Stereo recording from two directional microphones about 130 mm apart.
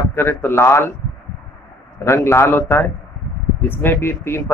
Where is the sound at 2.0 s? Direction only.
20° left (ahead or behind).